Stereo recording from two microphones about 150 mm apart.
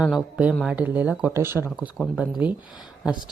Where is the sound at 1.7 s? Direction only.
5° right (ahead or behind).